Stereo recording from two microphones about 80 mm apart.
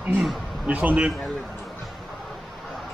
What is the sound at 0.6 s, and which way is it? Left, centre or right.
Speech, centre.